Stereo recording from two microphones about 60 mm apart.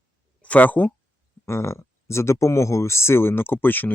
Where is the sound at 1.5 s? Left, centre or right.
Left.